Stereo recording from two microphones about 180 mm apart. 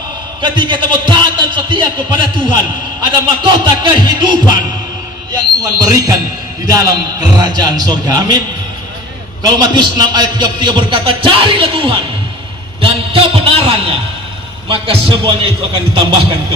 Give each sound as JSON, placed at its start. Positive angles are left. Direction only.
{"t": 0.4, "sound": "a man's voice", "side_deg": -25}
{"t": 9.5, "sound": "a man's voice", "side_deg": -25}